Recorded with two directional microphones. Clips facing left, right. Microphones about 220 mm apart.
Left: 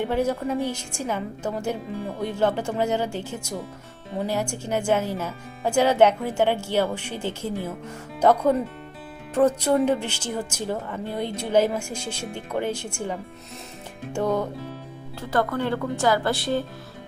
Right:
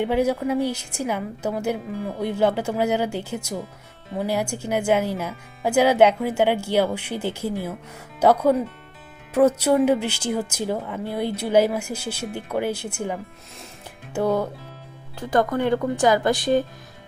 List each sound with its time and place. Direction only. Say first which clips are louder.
0.0 s a woman's voice: right 3 dB; 10° right (ahead or behind)